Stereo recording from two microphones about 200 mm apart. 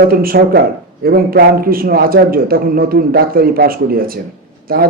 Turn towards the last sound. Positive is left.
turn(degrees=-50)  # may be behind; listen again after turning